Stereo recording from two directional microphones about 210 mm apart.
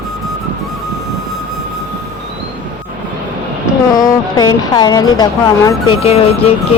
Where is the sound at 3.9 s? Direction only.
20° left (ahead or behind).